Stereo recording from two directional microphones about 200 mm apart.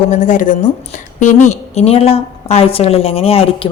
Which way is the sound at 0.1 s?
40° left (ahead or behind).